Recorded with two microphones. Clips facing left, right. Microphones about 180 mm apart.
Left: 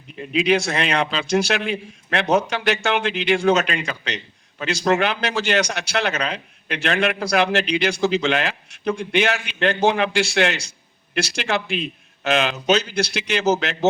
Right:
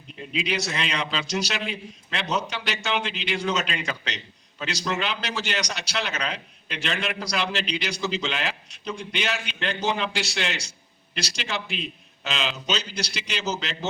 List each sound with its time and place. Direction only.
0.3 s a man's voice: 55° left (ahead or behind)